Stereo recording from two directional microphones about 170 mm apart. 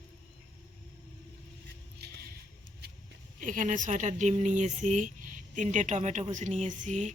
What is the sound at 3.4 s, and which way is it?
Speech, 50° right (ahead or behind).